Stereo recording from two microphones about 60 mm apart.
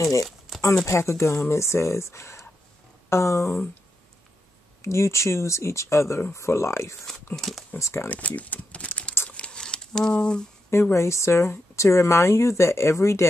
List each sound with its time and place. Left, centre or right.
0.8 s speech: left
4.8 s speech: left
7.3 s speech: centre
7.8 s speech: left
8.1 s speech: left
9.3 s a sound: centre
10.7 s speech: left